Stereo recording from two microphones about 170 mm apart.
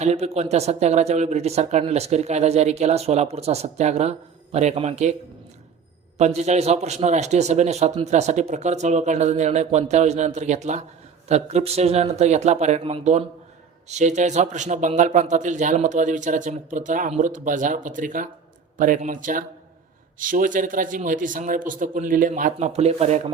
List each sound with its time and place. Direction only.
0.0 s a man's voice: 40° right (ahead or behind)
6.1 s a man's voice: 40° right (ahead or behind)